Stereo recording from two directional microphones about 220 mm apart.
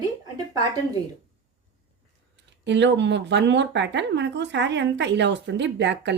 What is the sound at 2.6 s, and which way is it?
Speech, 55° right (ahead or behind).